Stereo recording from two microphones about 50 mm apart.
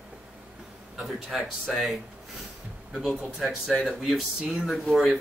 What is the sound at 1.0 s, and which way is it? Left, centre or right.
Speech, centre.